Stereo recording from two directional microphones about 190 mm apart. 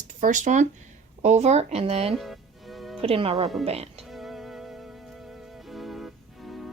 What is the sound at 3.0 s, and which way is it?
Speech, 30° right (ahead or behind).